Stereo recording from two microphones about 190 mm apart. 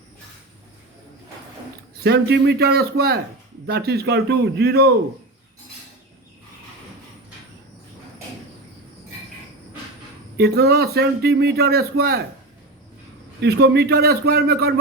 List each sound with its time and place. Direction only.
2.0 s a man's voice: 60° right (ahead or behind)
10.3 s a man's voice: 60° right (ahead or behind)
13.4 s a man's voice: 60° right (ahead or behind)